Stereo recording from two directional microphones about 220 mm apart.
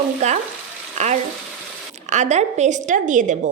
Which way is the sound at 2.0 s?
30° right (ahead or behind).